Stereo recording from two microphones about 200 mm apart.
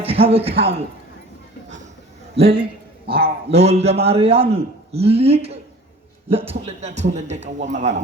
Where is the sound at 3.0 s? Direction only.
50° right (ahead or behind).